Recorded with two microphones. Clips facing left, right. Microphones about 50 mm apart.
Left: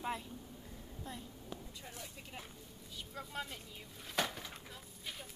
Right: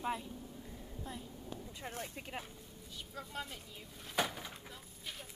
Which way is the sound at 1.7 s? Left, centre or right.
Right.